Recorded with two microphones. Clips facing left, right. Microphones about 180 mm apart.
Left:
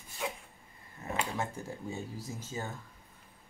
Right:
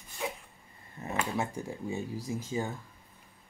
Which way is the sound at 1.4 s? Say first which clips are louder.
Right 3 dB; 15° right (ahead or behind).